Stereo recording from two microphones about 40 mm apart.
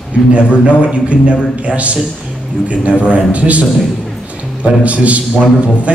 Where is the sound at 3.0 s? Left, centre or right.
Right.